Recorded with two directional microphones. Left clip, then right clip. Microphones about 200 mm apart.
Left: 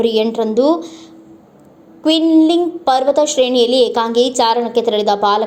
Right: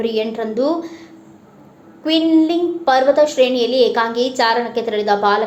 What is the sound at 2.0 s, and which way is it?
A woman's voice, 30° left (ahead or behind).